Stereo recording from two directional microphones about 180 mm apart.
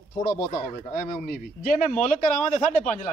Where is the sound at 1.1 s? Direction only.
55° left (ahead or behind).